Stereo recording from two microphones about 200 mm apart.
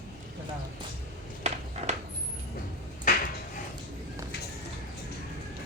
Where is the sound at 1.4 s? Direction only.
35° right (ahead or behind).